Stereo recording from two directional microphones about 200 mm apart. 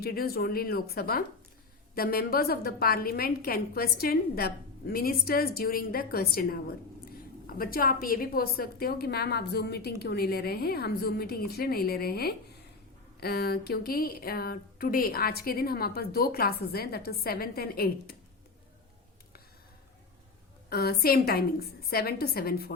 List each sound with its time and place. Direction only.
0.0 s speech: 50° left (ahead or behind)
20.7 s speech: 50° left (ahead or behind)